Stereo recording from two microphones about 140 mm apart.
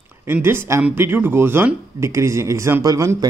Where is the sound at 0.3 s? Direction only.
15° right (ahead or behind).